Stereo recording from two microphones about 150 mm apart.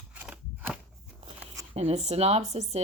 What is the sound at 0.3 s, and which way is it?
Scissors, 5° right (ahead or behind).